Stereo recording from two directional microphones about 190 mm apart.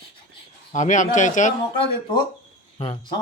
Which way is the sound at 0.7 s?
40° left (ahead or behind).